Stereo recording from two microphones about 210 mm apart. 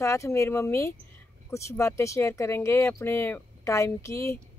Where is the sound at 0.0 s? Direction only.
15° left (ahead or behind).